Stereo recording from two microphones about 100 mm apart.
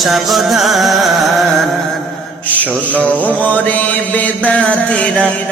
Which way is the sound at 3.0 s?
15° left (ahead or behind).